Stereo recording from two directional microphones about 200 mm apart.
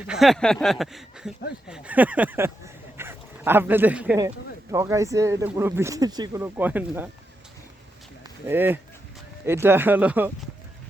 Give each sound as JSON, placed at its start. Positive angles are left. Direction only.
{"t": 0.1, "sound": "speech", "side_deg": 0}
{"t": 8.4, "sound": "speech", "side_deg": -10}